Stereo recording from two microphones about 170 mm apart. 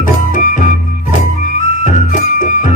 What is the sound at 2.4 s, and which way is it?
Music, 50° left (ahead or behind).